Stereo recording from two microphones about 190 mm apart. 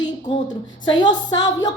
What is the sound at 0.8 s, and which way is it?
Speech, 20° left (ahead or behind).